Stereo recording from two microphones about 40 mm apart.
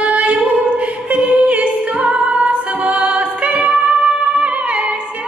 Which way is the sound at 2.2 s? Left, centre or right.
Right.